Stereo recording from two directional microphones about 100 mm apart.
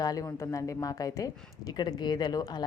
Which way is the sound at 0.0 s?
40° left (ahead or behind).